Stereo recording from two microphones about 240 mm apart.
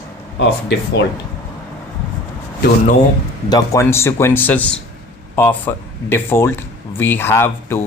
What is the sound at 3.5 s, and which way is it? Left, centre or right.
Speech, centre.